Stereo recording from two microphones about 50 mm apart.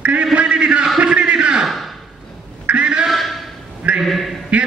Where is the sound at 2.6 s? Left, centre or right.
Right.